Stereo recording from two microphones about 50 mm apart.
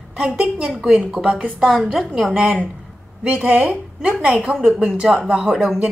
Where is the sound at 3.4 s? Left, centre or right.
Right.